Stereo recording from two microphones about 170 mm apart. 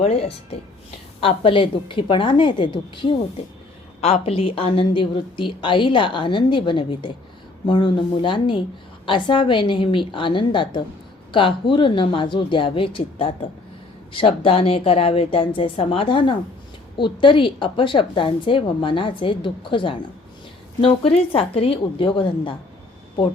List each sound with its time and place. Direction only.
0.0 s a woman's voice: 35° left (ahead or behind)